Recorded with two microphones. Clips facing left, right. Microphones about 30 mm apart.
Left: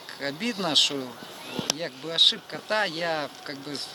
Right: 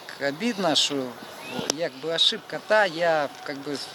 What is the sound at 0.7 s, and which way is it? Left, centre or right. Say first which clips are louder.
Speech: left 2 dB; centre.